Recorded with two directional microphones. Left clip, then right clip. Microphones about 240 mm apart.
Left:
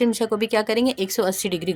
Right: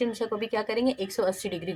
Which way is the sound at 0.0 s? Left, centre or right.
Left.